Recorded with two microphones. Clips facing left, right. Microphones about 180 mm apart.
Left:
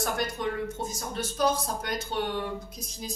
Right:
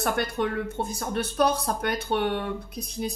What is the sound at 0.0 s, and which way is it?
A woman's voice, 60° right (ahead or behind).